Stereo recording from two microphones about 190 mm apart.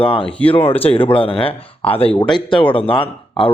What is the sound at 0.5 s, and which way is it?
Speech, 10° left (ahead or behind).